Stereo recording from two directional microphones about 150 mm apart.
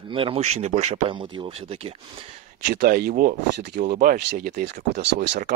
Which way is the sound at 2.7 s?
75° right (ahead or behind).